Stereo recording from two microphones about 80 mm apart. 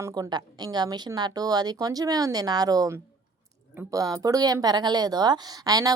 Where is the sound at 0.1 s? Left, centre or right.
Right.